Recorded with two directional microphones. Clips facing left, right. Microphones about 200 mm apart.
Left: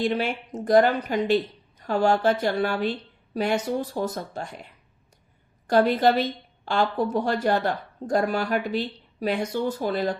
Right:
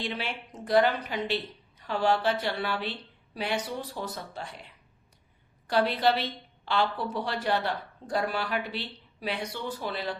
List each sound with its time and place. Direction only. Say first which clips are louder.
0.0 s speech: left 9 dB; 45° left (ahead or behind)
5.6 s speech: left 6 dB; 45° left (ahead or behind)